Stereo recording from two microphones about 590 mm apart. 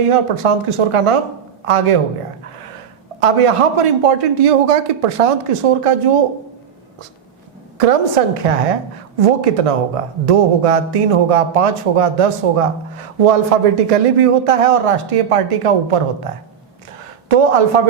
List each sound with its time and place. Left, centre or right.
0.0 s speech: right
3.2 s speech: right
7.8 s a woman's voice: right
17.2 s a man's voice: right